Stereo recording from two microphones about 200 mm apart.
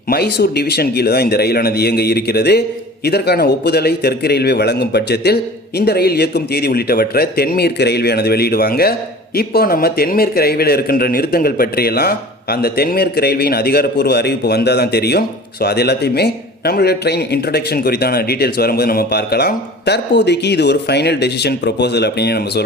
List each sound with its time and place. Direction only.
0.1 s speech: 50° left (ahead or behind)